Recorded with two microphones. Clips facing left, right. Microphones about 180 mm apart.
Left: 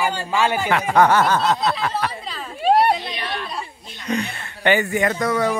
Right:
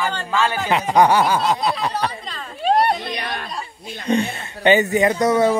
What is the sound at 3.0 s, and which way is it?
Chatter, 50° right (ahead or behind).